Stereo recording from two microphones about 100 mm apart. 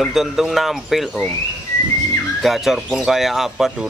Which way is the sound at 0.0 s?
5° right (ahead or behind).